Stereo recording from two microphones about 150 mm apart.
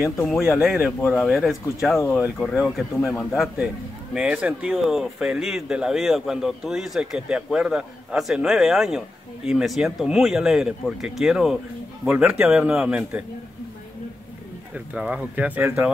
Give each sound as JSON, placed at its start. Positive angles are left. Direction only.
{"t": 0.0, "sound": "a man's voice", "side_deg": 0}
{"t": 2.0, "sound": "speech", "side_deg": 15}
{"t": 2.3, "sound": "a man's voice", "side_deg": 0}
{"t": 15.0, "sound": "a man's voice", "side_deg": -10}